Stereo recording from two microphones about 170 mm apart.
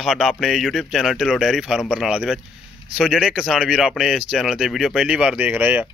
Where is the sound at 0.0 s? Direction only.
Centre (ahead or behind).